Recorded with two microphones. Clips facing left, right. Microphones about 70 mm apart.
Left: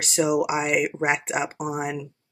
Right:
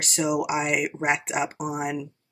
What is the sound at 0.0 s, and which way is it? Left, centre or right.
Speech, centre.